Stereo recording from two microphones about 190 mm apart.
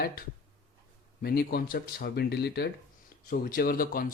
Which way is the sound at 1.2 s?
55° left (ahead or behind).